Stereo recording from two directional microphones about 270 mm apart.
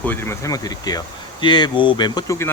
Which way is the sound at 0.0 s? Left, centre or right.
Centre.